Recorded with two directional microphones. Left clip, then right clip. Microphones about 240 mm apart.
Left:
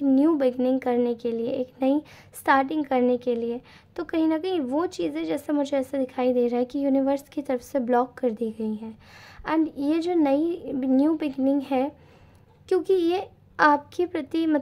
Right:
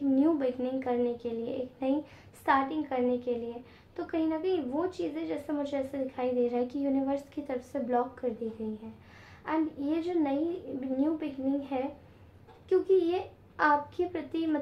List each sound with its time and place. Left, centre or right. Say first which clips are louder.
0.1 s a woman's voice: left 6 dB; left